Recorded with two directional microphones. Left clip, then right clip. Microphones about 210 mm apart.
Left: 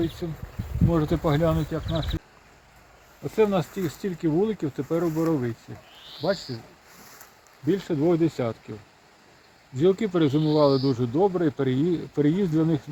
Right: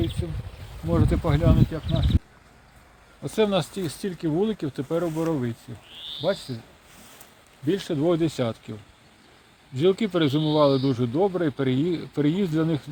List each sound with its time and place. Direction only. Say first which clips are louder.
0.2 s speech: left 1 dB; 5° right (ahead or behind)
3.2 s speech: even; 50° right (ahead or behind)
6.5 s speech: even; 40° right (ahead or behind)
7.7 s speech: even; 55° right (ahead or behind)
9.7 s speech: even; 40° right (ahead or behind)